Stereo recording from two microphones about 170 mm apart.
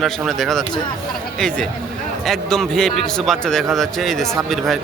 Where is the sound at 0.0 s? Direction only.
Centre (ahead or behind).